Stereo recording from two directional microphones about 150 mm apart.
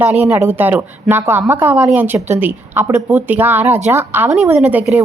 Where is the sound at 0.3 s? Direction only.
15° right (ahead or behind).